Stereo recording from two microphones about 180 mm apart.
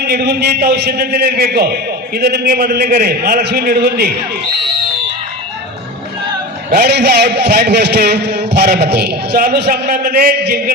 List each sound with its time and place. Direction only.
0.0 s a man's voice: 60° right (ahead or behind)
6.7 s a man's voice: 60° right (ahead or behind)